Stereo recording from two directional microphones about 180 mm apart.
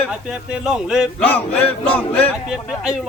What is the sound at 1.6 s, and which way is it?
Speech, 5° left (ahead or behind).